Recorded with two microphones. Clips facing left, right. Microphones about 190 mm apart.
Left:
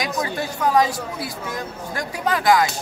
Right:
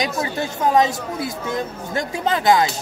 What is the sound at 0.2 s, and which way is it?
A man's voice, 25° right (ahead or behind).